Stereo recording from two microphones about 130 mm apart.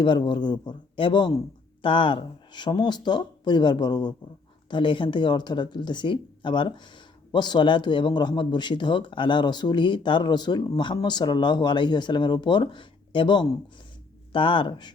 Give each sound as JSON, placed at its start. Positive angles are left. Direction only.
{"t": 0.0, "sound": "speech", "side_deg": 35}